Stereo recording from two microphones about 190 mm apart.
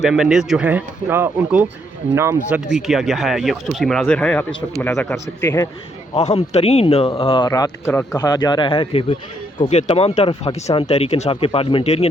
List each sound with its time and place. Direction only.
0.0 s speech: centre (ahead or behind)
2.7 s a man's voice: centre (ahead or behind); by 5.6 s 15° left (ahead or behind)
6.1 s speech: 35° left (ahead or behind)